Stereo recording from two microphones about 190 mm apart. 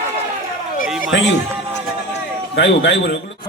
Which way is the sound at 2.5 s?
70° left (ahead or behind).